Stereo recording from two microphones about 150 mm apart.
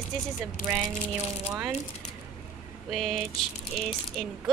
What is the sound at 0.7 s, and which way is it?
Speech, 15° right (ahead or behind).